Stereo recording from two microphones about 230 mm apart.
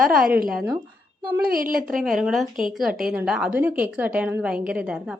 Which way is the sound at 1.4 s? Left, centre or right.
Right.